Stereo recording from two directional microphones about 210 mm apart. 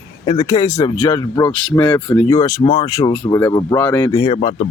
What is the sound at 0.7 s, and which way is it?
Speech, 30° left (ahead or behind).